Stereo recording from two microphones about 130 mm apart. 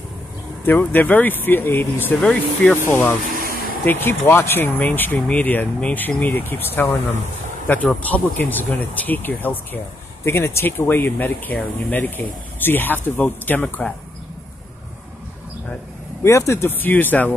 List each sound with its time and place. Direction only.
0.7 s speech: 15° left (ahead or behind)
16.2 s speech: 20° left (ahead or behind)